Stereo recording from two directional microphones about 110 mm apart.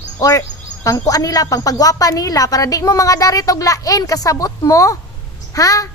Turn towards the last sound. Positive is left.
turn(degrees=30)  # may be behind; listen again after turning